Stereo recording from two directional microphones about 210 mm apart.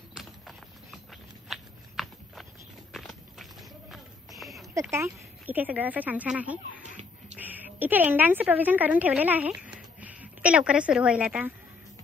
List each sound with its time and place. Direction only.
0.1 s a sound: centre (ahead or behind)
2.9 s walk: centre (ahead or behind)
3.9 s a sound: centre (ahead or behind)
4.9 s speech: 10° right (ahead or behind)
6.8 s music: 35° right (ahead or behind)
7.3 s a woman's voice: 10° right (ahead or behind)